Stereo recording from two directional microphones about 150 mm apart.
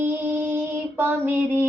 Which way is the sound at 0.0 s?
10° right (ahead or behind).